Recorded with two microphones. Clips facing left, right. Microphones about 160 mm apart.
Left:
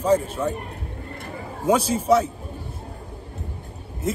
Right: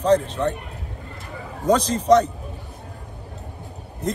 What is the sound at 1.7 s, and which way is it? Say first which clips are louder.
Speech: right 2 dB; 10° left (ahead or behind).